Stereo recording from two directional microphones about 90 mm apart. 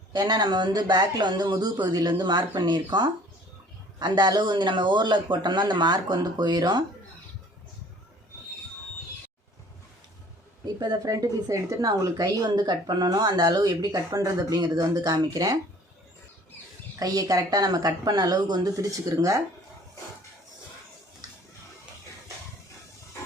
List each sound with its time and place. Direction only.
0.1 s speech: 50° right (ahead or behind)
10.8 s speech: 45° right (ahead or behind)
17.0 s speech: 45° right (ahead or behind)